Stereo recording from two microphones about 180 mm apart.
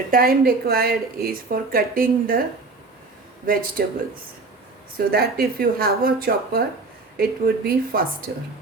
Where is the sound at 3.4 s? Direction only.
55° right (ahead or behind).